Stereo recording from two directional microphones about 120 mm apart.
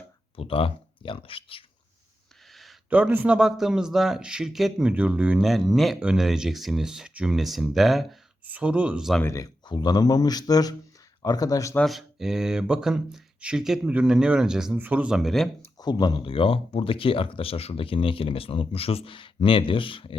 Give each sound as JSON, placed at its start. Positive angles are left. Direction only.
{"t": 0.3, "sound": "speech", "side_deg": 50}
{"t": 2.5, "sound": "a sound", "side_deg": 0}
{"t": 2.9, "sound": "a man's voice", "side_deg": -10}
{"t": 8.4, "sound": "speech", "side_deg": -10}
{"t": 9.2, "sound": "speech", "side_deg": 30}
{"t": 11.9, "sound": "a man's voice", "side_deg": 0}
{"t": 15.8, "sound": "speech", "side_deg": 35}